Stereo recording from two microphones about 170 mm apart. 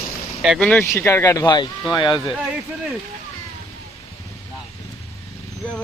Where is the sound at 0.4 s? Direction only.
Centre (ahead or behind); by 2.3 s 25° left (ahead or behind).